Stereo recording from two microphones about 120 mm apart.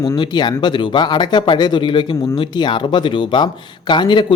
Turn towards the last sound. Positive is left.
turn(degrees=40)  # may be behind; listen again after turning